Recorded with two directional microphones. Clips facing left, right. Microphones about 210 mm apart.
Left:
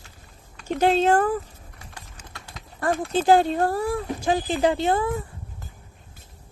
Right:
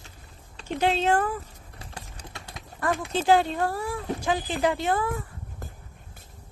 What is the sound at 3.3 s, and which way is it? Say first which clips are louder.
Speech: left 3 dB; 45° left (ahead or behind).